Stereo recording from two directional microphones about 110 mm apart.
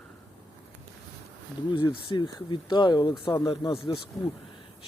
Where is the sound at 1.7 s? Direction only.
45° left (ahead or behind).